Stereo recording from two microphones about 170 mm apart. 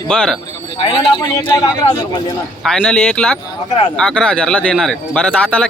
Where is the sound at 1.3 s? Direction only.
25° left (ahead or behind).